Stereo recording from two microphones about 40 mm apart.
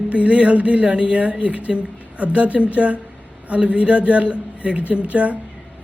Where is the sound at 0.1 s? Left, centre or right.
Right.